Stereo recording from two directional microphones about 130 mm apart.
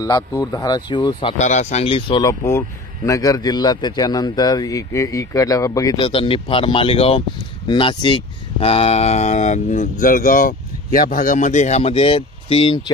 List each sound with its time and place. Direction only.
0.0 s speech: 25° left (ahead or behind)
1.4 s speech: 65° left (ahead or behind); by 2.2 s 40° left (ahead or behind)
2.2 s a man's voice: 20° left (ahead or behind)
5.9 s speech: 45° left (ahead or behind); by 11.9 s 60° left (ahead or behind)
11.9 s speech: 45° left (ahead or behind)